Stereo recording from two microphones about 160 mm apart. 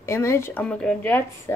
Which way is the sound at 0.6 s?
5° left (ahead or behind).